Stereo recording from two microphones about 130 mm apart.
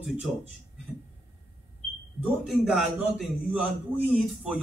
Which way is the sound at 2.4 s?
Centre (ahead or behind).